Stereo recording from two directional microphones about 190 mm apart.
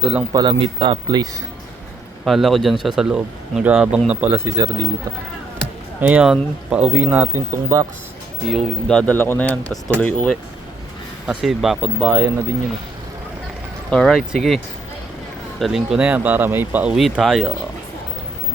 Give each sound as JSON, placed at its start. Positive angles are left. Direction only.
{"t": 0.0, "sound": "speech", "side_deg": -5}
{"t": 0.3, "sound": "speech", "side_deg": -25}
{"t": 2.2, "sound": "speech", "side_deg": 0}
{"t": 6.0, "sound": "speech", "side_deg": -5}
{"t": 8.4, "sound": "speech", "side_deg": 0}
{"t": 13.9, "sound": "speech", "side_deg": 0}